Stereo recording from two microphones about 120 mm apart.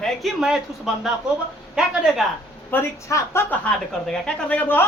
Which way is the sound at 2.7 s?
20° left (ahead or behind).